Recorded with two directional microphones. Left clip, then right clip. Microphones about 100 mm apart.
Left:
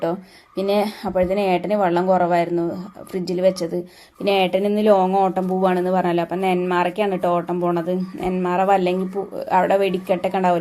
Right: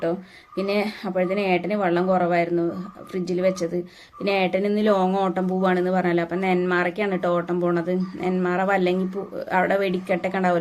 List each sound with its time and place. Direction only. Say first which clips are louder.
0.0 s speech: left 2 dB; 35° left (ahead or behind)